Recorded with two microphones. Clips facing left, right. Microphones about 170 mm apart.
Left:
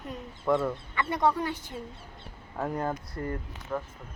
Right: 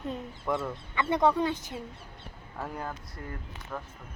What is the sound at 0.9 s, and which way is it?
Speech, 20° right (ahead or behind).